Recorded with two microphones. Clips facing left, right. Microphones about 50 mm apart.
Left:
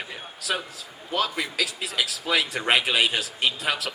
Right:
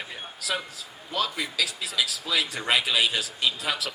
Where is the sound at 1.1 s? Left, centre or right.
Left.